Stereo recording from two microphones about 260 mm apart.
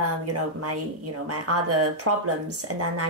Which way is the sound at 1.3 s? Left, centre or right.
Right.